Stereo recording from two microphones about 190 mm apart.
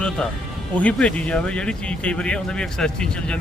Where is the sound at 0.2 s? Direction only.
5° left (ahead or behind).